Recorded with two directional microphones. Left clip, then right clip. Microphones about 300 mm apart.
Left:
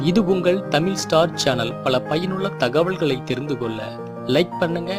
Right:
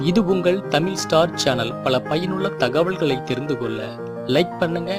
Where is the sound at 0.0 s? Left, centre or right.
Centre.